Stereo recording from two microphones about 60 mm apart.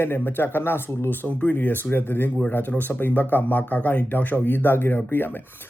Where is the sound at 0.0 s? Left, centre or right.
Left.